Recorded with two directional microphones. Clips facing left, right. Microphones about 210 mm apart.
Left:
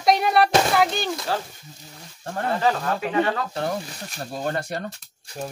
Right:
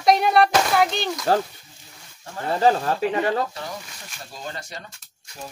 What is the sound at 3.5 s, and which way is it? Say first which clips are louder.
Speech: left 7 dB; 55° left (ahead or behind).